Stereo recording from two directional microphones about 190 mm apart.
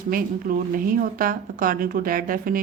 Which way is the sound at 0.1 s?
50° right (ahead or behind).